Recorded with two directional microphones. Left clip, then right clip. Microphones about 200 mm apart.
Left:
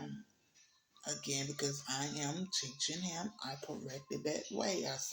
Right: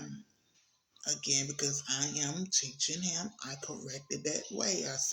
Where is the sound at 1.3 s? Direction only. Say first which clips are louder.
Right 5 dB; 15° right (ahead or behind).